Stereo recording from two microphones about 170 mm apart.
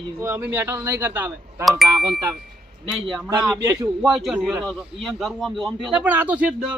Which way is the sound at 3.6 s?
20° right (ahead or behind).